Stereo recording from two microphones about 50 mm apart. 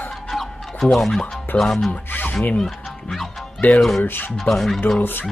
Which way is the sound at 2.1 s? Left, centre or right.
Left.